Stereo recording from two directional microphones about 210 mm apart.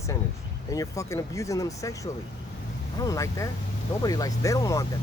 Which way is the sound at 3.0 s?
15° left (ahead or behind).